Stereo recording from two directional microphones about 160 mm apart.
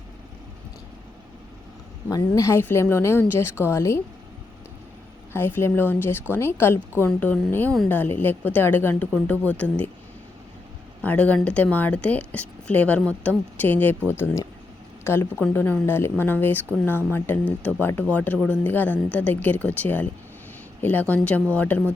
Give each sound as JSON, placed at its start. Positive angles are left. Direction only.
{"t": 2.0, "sound": "speech", "side_deg": 20}
{"t": 5.3, "sound": "speech", "side_deg": 15}
{"t": 11.0, "sound": "speech", "side_deg": 10}